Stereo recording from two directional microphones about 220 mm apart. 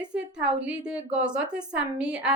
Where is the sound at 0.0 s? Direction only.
5° right (ahead or behind).